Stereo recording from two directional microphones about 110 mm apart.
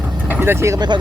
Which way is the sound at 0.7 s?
40° right (ahead or behind).